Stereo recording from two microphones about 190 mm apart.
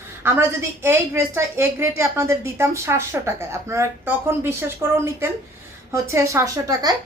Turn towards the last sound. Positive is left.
turn(degrees=-20)  # may be behind; listen again after turning